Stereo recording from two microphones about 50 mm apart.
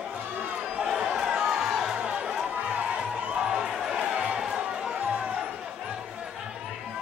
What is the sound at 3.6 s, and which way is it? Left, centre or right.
Music, centre.